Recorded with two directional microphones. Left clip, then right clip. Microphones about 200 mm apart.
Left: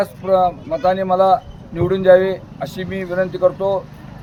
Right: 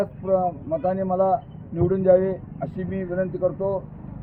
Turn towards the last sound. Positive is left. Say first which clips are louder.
# left 7 dB
turn(degrees=15)  # may be behind; listen again after turning